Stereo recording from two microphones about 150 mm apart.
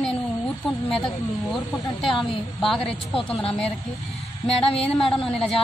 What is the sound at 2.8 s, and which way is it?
Speech, 40° left (ahead or behind).